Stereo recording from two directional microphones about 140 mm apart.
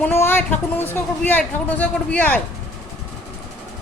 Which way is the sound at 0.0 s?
15° left (ahead or behind).